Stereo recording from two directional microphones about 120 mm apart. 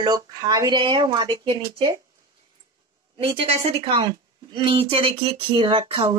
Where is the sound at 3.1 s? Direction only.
50° right (ahead or behind).